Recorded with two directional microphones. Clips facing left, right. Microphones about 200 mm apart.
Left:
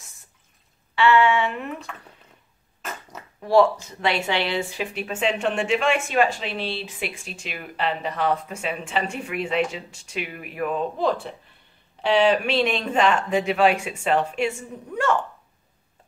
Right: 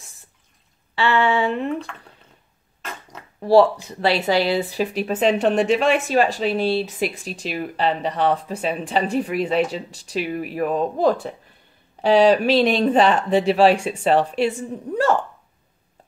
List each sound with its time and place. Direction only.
0.9 s a woman's voice: 35° right (ahead or behind)
2.8 s a sound: 5° left (ahead or behind)
3.3 s a woman's voice: 35° right (ahead or behind)